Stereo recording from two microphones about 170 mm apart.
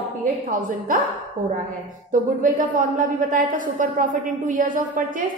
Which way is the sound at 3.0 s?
50° right (ahead or behind).